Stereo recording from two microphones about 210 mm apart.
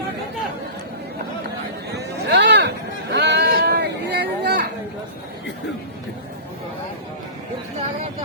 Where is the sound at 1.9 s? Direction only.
55° right (ahead or behind).